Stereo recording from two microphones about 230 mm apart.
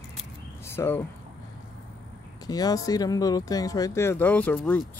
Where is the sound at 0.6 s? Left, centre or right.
Centre.